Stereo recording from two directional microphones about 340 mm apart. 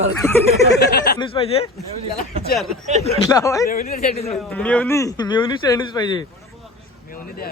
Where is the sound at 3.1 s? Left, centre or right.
Centre.